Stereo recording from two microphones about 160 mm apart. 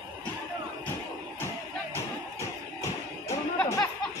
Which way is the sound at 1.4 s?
15° left (ahead or behind).